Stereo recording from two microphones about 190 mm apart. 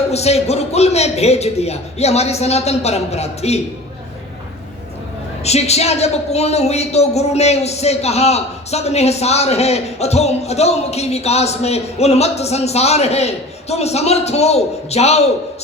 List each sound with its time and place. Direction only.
0.1 s a woman's voice: 35° left (ahead or behind)
5.4 s a woman's voice: 35° left (ahead or behind)